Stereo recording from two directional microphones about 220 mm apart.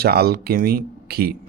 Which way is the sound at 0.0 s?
45° right (ahead or behind).